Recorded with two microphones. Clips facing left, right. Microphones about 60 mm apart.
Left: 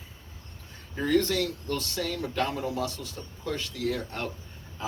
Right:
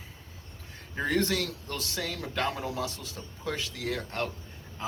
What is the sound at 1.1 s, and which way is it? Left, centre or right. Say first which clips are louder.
A man's voice: left 4 dB; right.